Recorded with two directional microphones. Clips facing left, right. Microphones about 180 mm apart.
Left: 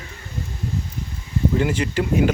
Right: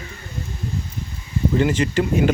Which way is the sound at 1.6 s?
5° left (ahead or behind).